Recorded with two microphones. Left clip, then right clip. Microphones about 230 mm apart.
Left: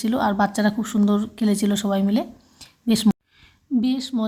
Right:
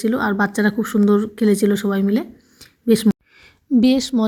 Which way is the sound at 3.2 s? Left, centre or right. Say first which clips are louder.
Right 6 dB; centre.